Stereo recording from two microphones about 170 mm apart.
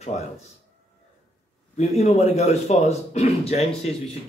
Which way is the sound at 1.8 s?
40° left (ahead or behind).